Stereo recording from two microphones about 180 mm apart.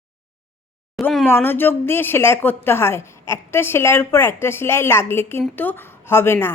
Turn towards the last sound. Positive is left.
turn(degrees=15)  # may be behind; listen again after turning